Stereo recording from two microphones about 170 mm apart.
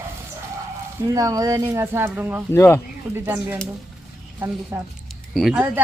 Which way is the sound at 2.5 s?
15° left (ahead or behind).